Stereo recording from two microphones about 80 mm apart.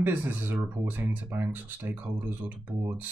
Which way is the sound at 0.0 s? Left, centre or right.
Right.